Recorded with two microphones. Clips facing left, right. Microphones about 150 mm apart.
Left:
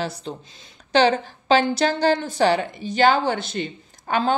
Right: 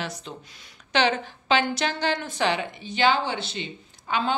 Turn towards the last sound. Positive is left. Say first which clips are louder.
# left 4 dB
turn(degrees=50)  # may be behind; listen again after turning